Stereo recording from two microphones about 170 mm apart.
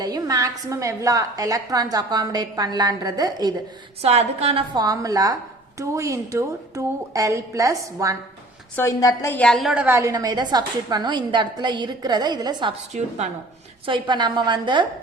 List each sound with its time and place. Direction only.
0.0 s a woman's voice: 20° right (ahead or behind)
4.0 s a woman's voice: 40° right (ahead or behind); by 8.1 s 20° right (ahead or behind)
8.7 s a woman's voice: 15° left (ahead or behind); by 12.7 s 25° right (ahead or behind)
12.9 s a woman's voice: 40° right (ahead or behind)
13.8 s a woman's voice: 30° right (ahead or behind)